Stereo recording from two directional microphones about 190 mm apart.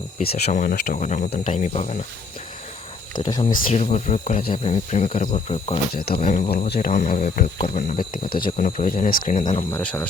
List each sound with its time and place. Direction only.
0.5 s speech: 45° left (ahead or behind)
3.2 s speech: 20° left (ahead or behind)
3.7 s speech: 35° left (ahead or behind)
5.9 s speech: 55° left (ahead or behind)
9.7 s speech: 5° left (ahead or behind)